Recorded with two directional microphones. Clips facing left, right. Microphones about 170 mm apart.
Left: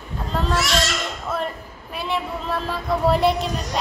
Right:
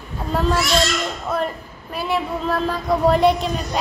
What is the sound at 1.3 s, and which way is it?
A woman's voice, centre (ahead or behind).